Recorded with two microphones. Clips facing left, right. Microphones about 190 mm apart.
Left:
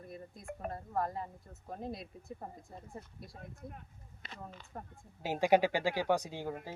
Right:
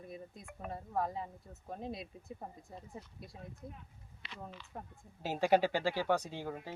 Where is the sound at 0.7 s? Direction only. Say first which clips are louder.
Right 1 dB; centre (ahead or behind).